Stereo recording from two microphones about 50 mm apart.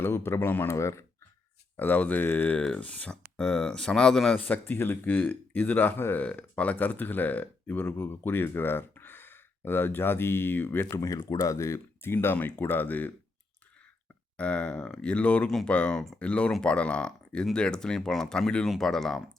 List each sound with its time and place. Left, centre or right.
0.0 s speech: left
0.7 s speech: left
1.7 s speech: left
3.3 s speech: centre
4.4 s speech: left
4.6 s speech: left
10.9 s speech: left
12.1 s speech: left
14.3 s speech: left